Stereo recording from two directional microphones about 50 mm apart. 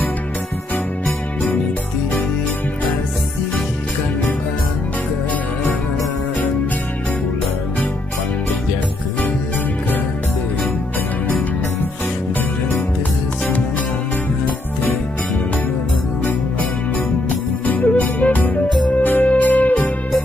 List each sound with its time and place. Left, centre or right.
17.2 s music: left